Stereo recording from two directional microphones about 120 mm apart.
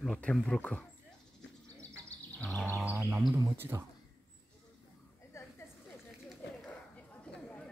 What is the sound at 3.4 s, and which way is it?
Speech, 20° right (ahead or behind).